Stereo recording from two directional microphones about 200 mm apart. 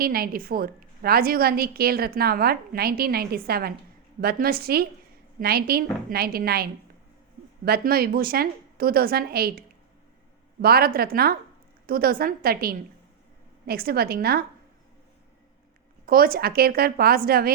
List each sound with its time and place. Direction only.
0.0 s a woman's voice: 50° right (ahead or behind)
16.0 s a woman's voice: 45° right (ahead or behind)